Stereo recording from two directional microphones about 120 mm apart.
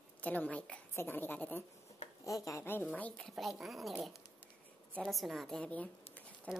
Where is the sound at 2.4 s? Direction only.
25° left (ahead or behind); by 6.6 s 5° left (ahead or behind).